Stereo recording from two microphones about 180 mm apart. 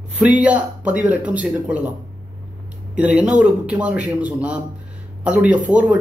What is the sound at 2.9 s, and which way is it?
Speech, 5° right (ahead or behind).